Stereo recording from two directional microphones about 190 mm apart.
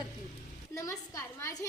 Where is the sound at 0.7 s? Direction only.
15° left (ahead or behind).